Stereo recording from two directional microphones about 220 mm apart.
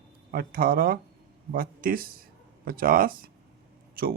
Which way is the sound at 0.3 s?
40° right (ahead or behind).